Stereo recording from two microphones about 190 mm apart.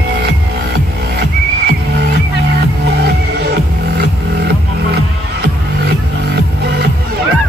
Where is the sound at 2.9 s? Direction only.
55° right (ahead or behind).